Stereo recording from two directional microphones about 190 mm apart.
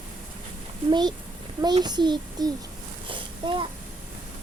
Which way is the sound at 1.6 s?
20° right (ahead or behind).